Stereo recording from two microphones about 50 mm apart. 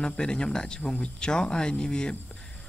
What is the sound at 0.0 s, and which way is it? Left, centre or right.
Speech, centre.